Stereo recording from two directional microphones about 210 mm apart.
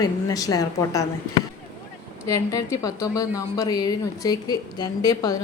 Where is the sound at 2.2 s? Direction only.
15° left (ahead or behind).